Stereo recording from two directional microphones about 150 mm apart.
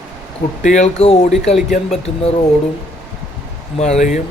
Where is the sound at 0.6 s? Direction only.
55° left (ahead or behind).